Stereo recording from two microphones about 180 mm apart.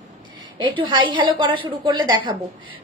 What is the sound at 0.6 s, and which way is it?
A woman's voice, 25° right (ahead or behind).